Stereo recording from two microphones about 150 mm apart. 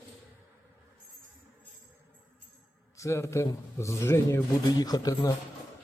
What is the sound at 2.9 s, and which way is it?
A man's voice, 20° left (ahead or behind).